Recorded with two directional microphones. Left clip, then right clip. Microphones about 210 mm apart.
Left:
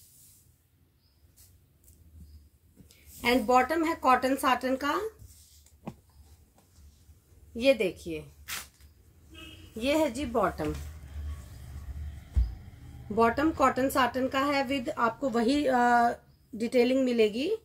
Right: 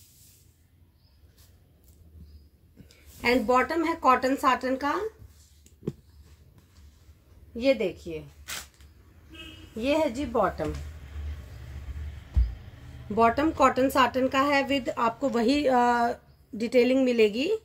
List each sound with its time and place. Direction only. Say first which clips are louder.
2.9 s speech: right 2 dB; centre (ahead or behind)
7.5 s speech: even; 15° left (ahead or behind)
9.8 s speech: right 2 dB; 5° left (ahead or behind)
13.1 s speech: right 3 dB; 15° right (ahead or behind)